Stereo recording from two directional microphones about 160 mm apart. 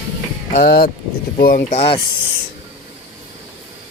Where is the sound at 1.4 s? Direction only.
60° left (ahead or behind).